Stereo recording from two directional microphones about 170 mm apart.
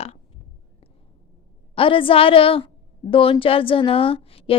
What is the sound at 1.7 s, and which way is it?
A woman's voice, 30° left (ahead or behind).